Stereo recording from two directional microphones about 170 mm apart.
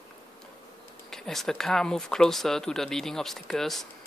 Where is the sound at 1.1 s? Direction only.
Centre (ahead or behind).